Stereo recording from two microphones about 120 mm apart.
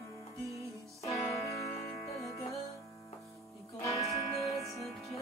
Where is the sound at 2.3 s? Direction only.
25° left (ahead or behind).